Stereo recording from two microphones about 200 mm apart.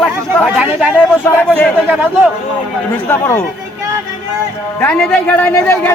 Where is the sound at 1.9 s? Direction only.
5° right (ahead or behind).